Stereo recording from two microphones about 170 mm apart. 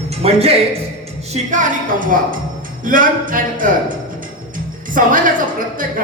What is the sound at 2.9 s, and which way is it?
A woman's voice, 55° right (ahead or behind).